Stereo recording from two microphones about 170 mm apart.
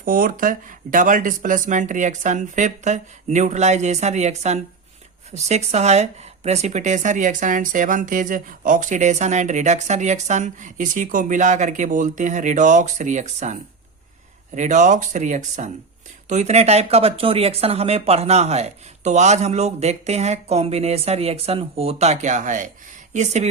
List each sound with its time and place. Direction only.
0.0 s speech: 55° right (ahead or behind)